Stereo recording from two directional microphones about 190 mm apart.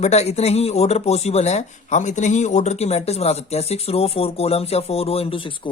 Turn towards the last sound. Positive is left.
turn(degrees=25)  # may be behind; listen again after turning